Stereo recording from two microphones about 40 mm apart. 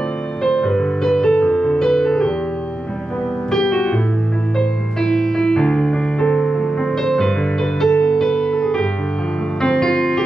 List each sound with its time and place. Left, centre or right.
0.4 s music: centre
3.5 s music: centre